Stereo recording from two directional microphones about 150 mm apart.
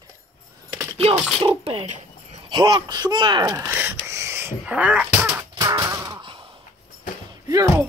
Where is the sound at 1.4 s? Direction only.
35° right (ahead or behind).